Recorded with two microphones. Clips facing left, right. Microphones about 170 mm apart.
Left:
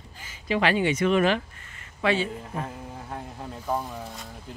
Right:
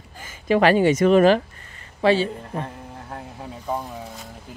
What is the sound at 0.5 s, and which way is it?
Speech, 45° right (ahead or behind).